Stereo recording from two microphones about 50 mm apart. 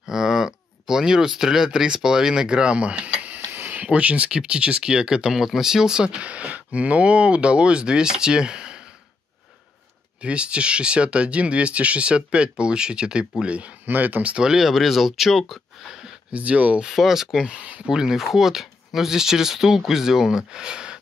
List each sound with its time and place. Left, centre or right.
0.1 s a sound: centre
0.8 s speech: centre; by 3.8 s right
3.8 s speech: right
10.2 s speech: right
13.8 s speech: right
14.3 s speech: centre
16.3 s speech: right
16.9 s speech: centre